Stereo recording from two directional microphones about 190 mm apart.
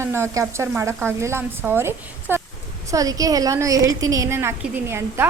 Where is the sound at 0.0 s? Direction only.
15° right (ahead or behind).